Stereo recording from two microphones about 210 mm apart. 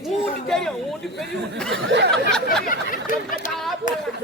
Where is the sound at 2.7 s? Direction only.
40° left (ahead or behind).